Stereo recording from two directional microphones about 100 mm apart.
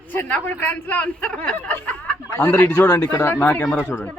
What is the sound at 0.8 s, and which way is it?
Speech, 15° left (ahead or behind).